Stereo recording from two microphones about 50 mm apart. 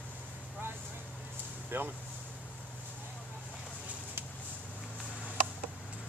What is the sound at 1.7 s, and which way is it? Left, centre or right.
Speech, right.